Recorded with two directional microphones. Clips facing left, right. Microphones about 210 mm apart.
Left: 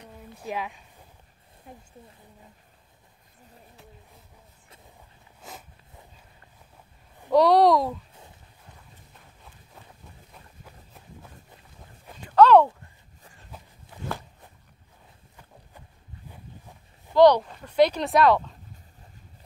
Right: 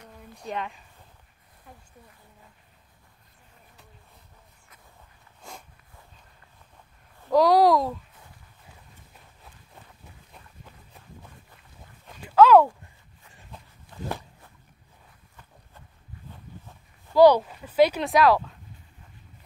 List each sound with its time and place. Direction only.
0.4 s speech: 5° left (ahead or behind)
1.7 s speech: 25° left (ahead or behind)
7.2 s speech: centre (ahead or behind)
12.3 s a sound: 5° right (ahead or behind)
13.9 s walk: 10° left (ahead or behind)
17.1 s speech: 5° right (ahead or behind)